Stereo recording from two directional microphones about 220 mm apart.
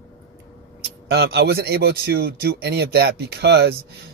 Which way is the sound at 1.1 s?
50° right (ahead or behind).